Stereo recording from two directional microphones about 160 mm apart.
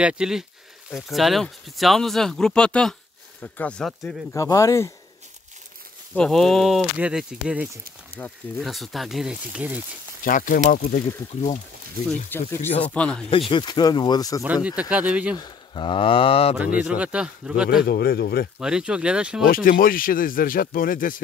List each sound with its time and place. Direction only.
0.0 s speech: 5° right (ahead or behind)
4.3 s speech: 20° left (ahead or behind)
6.1 s speech: 5° left (ahead or behind)
8.2 s speech: 10° left (ahead or behind)
8.6 s speech: centre (ahead or behind)
10.2 s speech: 55° left (ahead or behind)
12.1 s speech: 15° left (ahead or behind)
13.3 s speech: 30° left (ahead or behind)
14.4 s speech: 10° right (ahead or behind)
15.3 s speech: 30° left (ahead or behind)
16.8 s speech: 5° right (ahead or behind)
17.8 s speech: 85° left
18.6 s speech: 5° right (ahead or behind)
19.4 s speech: 65° left (ahead or behind)